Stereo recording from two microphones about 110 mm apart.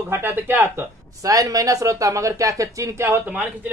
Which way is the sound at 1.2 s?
35° right (ahead or behind).